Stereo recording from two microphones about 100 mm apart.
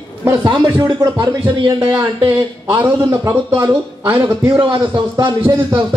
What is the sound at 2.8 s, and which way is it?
Speech, 45° right (ahead or behind).